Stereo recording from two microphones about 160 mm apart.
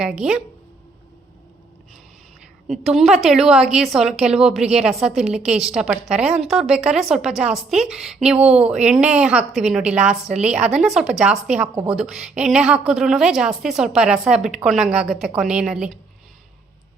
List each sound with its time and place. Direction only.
0.0 s a woman's voice: 5° right (ahead or behind)
2.6 s a woman's voice: centre (ahead or behind)